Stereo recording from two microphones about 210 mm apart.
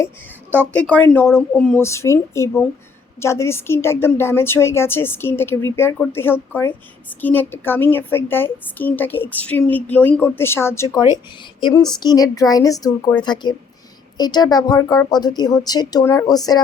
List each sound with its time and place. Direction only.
0.7 s a woman's voice: 5° left (ahead or behind)